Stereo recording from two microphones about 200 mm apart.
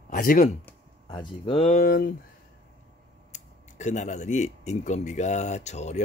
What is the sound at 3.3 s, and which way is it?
Speech, 35° left (ahead or behind).